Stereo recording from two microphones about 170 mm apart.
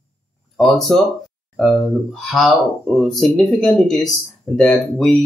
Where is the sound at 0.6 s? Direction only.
Centre (ahead or behind).